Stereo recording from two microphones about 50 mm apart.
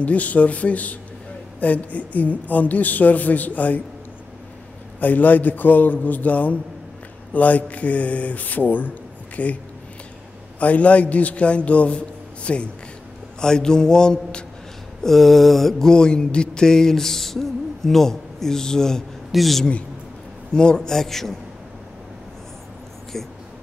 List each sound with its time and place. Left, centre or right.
0.0 s a man's voice: left
5.0 s a man's voice: left
10.6 s a man's voice: left
13.4 s mantra: centre
15.0 s mantra: centre
19.3 s speech: centre
20.5 s mantra: centre
23.1 s speech: centre